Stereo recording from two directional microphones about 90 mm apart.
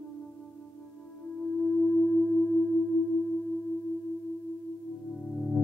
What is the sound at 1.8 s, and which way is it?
Singing bowl, 20° left (ahead or behind).